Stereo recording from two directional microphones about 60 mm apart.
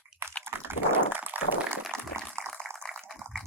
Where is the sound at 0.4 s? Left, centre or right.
Right.